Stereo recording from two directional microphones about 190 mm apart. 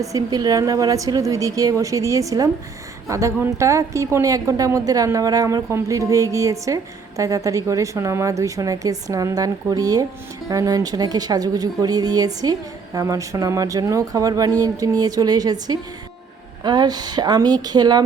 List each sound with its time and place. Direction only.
0.0 s a woman's voice: 20° right (ahead or behind)